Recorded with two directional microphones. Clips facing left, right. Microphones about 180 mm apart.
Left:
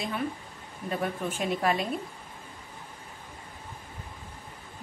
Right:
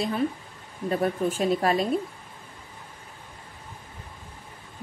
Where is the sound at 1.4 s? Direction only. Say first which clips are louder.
Right 3 dB; 35° right (ahead or behind).